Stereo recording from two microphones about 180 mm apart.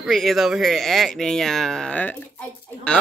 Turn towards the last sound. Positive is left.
turn(degrees=5)  # may be behind; listen again after turning